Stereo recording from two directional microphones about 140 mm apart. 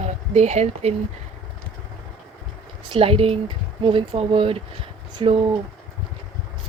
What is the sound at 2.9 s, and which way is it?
Speech, 40° right (ahead or behind).